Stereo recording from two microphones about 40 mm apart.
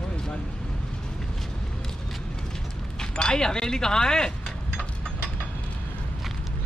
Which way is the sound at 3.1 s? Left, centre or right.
Centre.